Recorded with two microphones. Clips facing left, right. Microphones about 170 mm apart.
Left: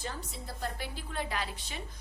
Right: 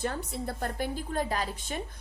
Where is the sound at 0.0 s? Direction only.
60° right (ahead or behind).